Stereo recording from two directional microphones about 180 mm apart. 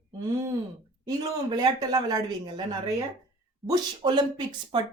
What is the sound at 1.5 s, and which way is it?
A woman's voice, 25° right (ahead or behind).